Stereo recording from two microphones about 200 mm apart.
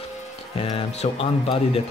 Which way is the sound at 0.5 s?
30° left (ahead or behind).